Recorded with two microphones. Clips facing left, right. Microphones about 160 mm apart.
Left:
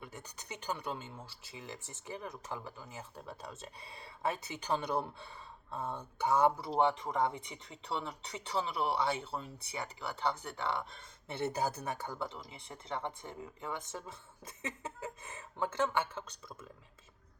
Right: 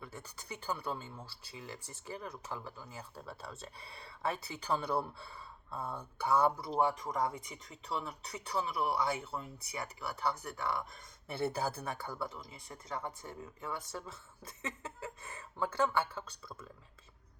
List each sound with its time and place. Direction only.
0.0 s speech: 15° left (ahead or behind)
11.5 s speech: 15° left (ahead or behind)
12.2 s speech: 25° left (ahead or behind)